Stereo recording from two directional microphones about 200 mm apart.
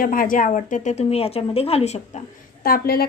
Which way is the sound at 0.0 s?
45° left (ahead or behind).